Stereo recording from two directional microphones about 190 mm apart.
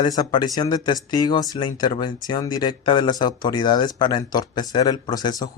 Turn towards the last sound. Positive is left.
turn(degrees=20)  # may be behind; listen again after turning